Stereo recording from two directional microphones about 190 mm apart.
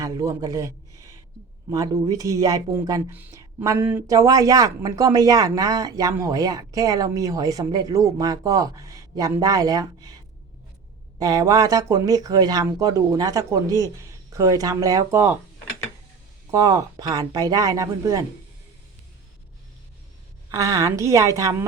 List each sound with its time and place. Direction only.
0.0 s a man's voice: 15° right (ahead or behind)
11.2 s speech: 20° right (ahead or behind)
16.5 s speech: 15° right (ahead or behind)
20.5 s speech: 15° right (ahead or behind)